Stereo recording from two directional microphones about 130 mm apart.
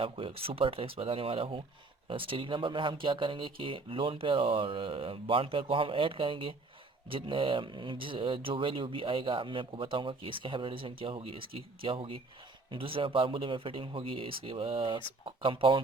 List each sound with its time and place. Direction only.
0.0 s a man's voice: 45° right (ahead or behind)